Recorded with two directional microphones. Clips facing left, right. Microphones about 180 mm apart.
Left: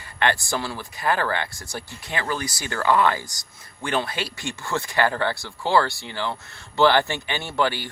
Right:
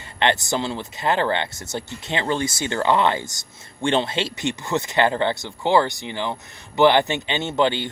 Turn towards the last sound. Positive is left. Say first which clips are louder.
# right 4 dB
turn(degrees=-20)  # may be behind; listen again after turning